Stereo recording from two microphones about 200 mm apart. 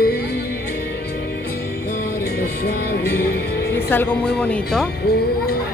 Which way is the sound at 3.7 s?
10° left (ahead or behind).